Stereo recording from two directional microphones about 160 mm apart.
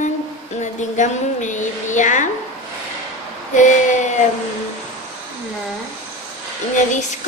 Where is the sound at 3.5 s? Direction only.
50° left (ahead or behind).